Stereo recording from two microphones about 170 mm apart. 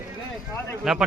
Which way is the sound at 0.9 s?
Centre (ahead or behind).